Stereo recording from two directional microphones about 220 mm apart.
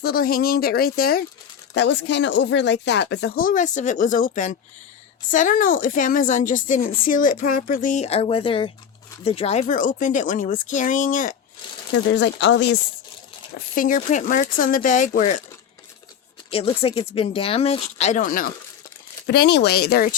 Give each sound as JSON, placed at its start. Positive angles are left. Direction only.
{"t": 0.0, "sound": "a woman's voice", "side_deg": 40}
{"t": 12.1, "sound": "speech", "side_deg": 55}
{"t": 13.7, "sound": "a woman's voice", "side_deg": 35}
{"t": 16.5, "sound": "speech", "side_deg": 25}